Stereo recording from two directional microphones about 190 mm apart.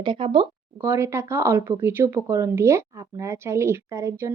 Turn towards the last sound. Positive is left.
turn(degrees=-15)  # may be behind; listen again after turning